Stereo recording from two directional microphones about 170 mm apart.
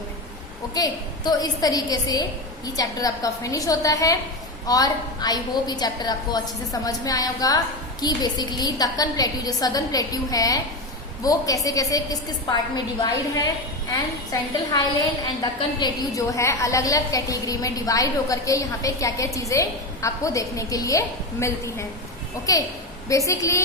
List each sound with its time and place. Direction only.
0.7 s a woman's voice: 25° left (ahead or behind)